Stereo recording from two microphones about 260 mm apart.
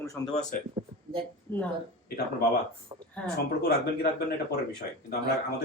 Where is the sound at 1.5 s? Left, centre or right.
Centre.